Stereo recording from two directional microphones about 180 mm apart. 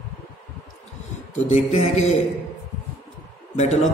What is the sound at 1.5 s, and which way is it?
Speech, 35° left (ahead or behind).